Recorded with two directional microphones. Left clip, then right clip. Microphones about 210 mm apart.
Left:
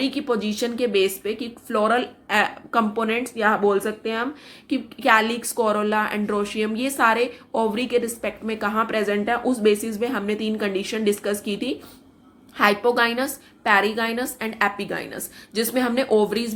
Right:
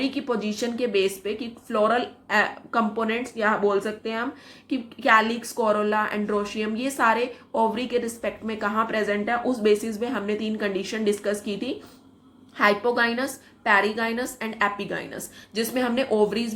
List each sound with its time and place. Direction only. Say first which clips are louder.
0.0 s a woman's voice: left 3 dB; 20° left (ahead or behind)